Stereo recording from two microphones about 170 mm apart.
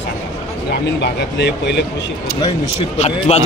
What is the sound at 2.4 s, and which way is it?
Speech, 35° left (ahead or behind).